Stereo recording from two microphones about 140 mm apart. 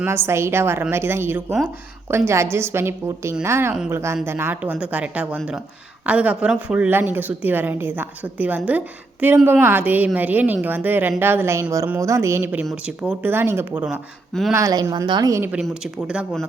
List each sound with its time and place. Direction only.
0.0 s a woman's voice: 20° right (ahead or behind)
14.5 s speech: 25° right (ahead or behind)
15.5 s speech: 5° right (ahead or behind)